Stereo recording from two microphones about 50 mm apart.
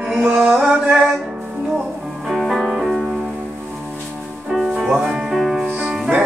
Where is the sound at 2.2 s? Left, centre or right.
Centre.